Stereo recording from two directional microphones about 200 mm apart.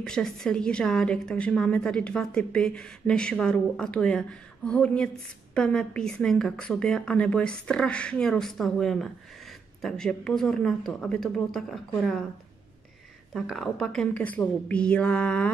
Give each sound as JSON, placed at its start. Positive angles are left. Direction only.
{"t": 0.0, "sound": "a woman's voice", "side_deg": 5}
{"t": 13.3, "sound": "a woman's voice", "side_deg": 0}